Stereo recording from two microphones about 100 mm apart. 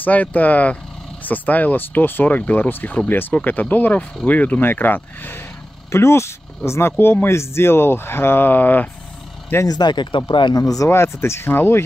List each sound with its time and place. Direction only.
0.0 s speech: 15° left (ahead or behind)
9.7 s speech: 45° left (ahead or behind)
10.5 s speech: 35° left (ahead or behind)